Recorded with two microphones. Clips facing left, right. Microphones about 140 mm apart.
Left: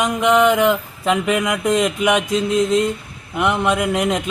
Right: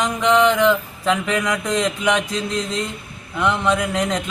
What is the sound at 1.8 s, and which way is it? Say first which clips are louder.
Mantra: left 3 dB; 15° left (ahead or behind).